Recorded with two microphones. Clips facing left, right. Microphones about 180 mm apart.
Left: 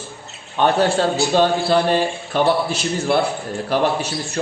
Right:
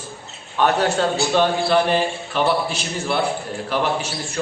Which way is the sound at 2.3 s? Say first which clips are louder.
Left 3 dB; 40° left (ahead or behind).